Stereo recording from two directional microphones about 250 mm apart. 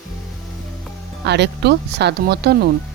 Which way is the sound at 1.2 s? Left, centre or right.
Right.